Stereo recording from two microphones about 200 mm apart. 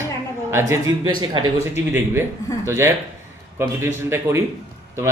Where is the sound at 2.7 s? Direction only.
10° right (ahead or behind).